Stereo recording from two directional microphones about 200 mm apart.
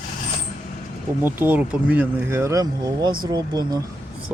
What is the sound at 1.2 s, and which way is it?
Speech, 10° right (ahead or behind).